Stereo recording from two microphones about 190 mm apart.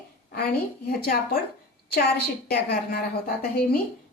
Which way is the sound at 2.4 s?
50° left (ahead or behind).